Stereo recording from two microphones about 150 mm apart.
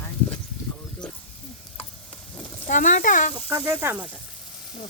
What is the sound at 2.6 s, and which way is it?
Speech, 60° left (ahead or behind).